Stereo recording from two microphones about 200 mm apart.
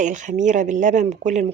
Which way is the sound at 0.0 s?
40° right (ahead or behind).